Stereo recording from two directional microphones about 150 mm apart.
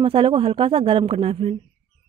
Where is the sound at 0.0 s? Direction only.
35° right (ahead or behind).